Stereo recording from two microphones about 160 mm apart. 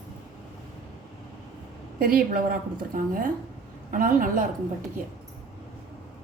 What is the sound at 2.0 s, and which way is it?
A woman's voice, 65° right (ahead or behind).